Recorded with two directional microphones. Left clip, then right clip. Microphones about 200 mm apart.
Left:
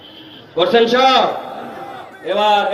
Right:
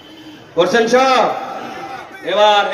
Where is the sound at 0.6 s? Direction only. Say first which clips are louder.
Even; 35° right (ahead or behind).